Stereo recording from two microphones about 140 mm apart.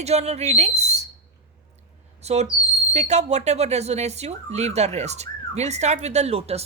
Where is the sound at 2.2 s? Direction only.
50° right (ahead or behind).